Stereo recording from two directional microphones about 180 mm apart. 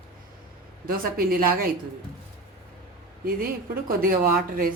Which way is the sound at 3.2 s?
55° right (ahead or behind).